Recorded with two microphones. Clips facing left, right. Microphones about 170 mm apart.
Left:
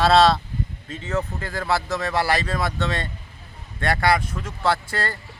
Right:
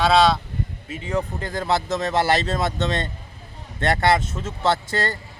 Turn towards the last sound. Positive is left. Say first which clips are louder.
# right 2 dB
turn(degrees=-25)  # may be behind; listen again after turning